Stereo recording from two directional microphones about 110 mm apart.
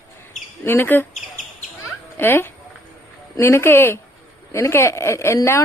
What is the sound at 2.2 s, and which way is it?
Speech, 20° left (ahead or behind).